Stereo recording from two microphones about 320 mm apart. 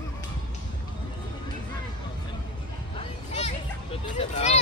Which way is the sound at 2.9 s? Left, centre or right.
Centre.